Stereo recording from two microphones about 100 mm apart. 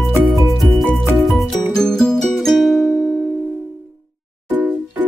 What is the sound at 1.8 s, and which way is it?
Music, 5° left (ahead or behind).